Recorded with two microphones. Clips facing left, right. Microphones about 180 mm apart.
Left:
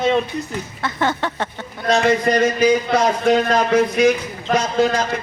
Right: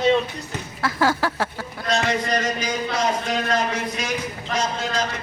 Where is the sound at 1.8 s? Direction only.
60° left (ahead or behind).